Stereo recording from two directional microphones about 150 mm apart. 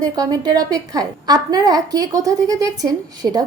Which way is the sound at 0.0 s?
25° right (ahead or behind).